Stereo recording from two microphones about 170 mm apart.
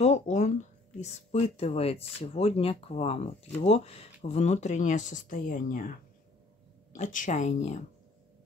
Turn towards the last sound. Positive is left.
turn(degrees=45)  # may be behind; listen again after turning